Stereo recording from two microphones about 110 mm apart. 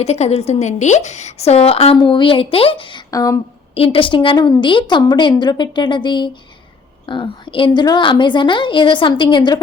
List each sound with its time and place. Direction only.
0.0 s a woman's voice: 75° left (ahead or behind)
2.0 s a woman's voice: 45° left (ahead or behind)
3.1 s speech: 35° left (ahead or behind)
3.8 s a woman's voice: 55° left (ahead or behind)